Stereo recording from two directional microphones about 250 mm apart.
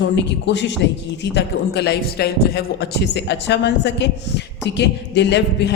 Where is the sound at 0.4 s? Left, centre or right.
Left.